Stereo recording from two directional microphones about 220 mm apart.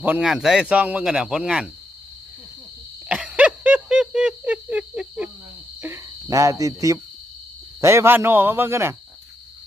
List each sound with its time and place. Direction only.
0.0 s speech: 5° right (ahead or behind)
3.1 s a sound: 5° right (ahead or behind)
5.8 s cricket: 15° right (ahead or behind)
7.8 s a man's voice: 10° right (ahead or behind)